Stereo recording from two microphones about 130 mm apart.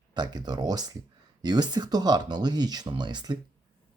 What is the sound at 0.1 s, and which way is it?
Speech, 35° right (ahead or behind).